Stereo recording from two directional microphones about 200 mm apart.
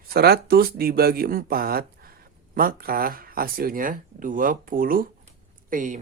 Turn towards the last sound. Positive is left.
turn(degrees=-40)  # may be behind; listen again after turning